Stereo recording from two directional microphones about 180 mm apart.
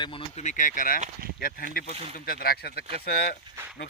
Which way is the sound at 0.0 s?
30° left (ahead or behind).